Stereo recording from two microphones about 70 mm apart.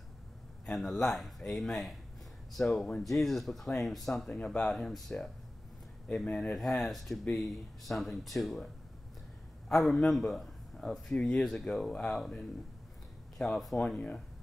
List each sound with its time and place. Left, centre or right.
0.7 s a man's voice: centre
6.2 s speech: centre
6.5 s a man's voice: centre
9.7 s a man's voice: centre